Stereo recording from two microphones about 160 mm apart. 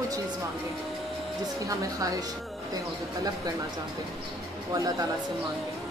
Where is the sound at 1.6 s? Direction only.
20° right (ahead or behind).